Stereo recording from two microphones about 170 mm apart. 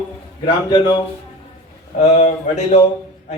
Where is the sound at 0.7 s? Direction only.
25° left (ahead or behind).